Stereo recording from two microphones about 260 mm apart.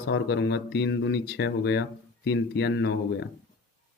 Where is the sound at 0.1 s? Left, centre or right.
Left.